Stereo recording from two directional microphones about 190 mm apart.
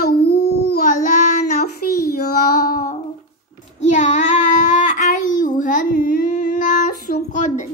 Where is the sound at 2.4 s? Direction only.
50° left (ahead or behind).